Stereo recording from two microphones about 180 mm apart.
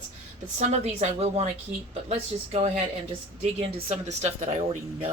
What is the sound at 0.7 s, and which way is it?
A woman's voice, 40° right (ahead or behind).